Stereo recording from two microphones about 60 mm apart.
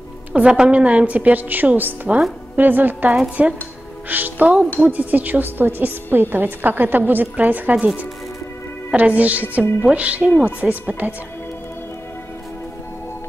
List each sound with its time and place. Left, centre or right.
0.3 s a woman's voice: centre; by 3.2 s right
3.4 s a woman's voice: right
8.9 s a woman's voice: right